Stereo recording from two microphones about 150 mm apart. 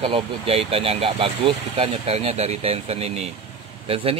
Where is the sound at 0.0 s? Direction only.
40° right (ahead or behind).